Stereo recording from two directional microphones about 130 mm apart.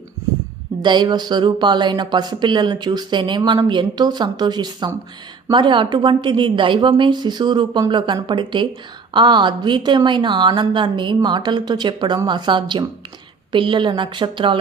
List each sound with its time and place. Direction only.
0.8 s speech: 35° right (ahead or behind)